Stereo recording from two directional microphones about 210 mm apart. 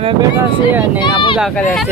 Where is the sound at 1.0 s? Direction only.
25° left (ahead or behind).